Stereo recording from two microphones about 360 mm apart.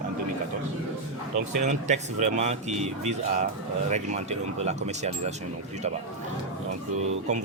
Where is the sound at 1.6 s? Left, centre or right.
Centre.